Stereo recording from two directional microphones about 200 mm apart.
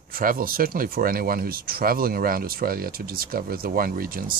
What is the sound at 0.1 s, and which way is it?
Speech, 45° right (ahead or behind).